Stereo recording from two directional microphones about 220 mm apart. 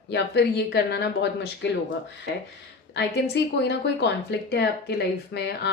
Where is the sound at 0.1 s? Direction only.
50° left (ahead or behind).